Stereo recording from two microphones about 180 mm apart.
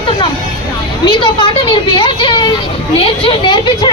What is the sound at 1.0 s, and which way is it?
Speech, 25° left (ahead or behind).